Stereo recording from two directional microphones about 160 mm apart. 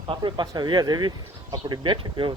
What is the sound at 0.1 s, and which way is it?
A man's voice, 30° right (ahead or behind).